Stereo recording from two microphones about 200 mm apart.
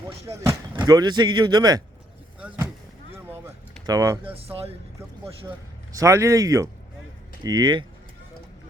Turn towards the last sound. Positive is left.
turn(degrees=-20)  # may be behind; listen again after turning